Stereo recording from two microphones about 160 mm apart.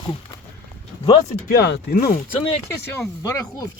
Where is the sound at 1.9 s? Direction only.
60° left (ahead or behind).